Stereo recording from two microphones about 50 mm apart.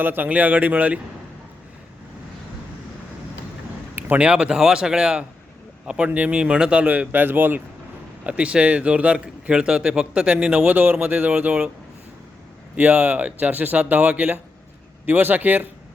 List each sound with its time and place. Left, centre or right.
0.0 s speech: right
4.2 s a man's voice: centre; by 7.6 s right
8.2 s a man's voice: right
10.7 s speech: right
11.3 s a man's voice: right
12.7 s speech: right
15.0 s speech: right